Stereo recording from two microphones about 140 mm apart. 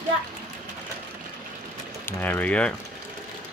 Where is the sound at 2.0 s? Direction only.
15° left (ahead or behind).